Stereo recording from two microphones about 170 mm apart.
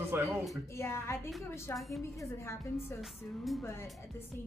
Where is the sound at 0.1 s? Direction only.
15° right (ahead or behind).